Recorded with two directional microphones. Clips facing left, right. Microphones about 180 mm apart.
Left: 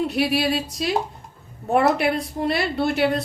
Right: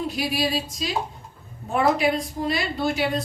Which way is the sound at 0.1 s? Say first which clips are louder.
Left 4 dB; 65° left (ahead or behind).